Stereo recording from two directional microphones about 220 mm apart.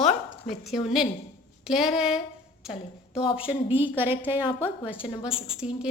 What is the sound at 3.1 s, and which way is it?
Speech, 25° left (ahead or behind).